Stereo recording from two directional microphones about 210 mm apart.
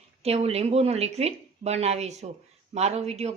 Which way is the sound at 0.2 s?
30° right (ahead or behind).